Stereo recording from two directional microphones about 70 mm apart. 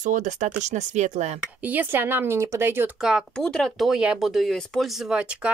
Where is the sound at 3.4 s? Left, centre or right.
Centre.